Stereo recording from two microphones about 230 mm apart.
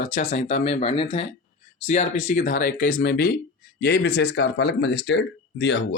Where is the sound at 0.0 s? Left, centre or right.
Left.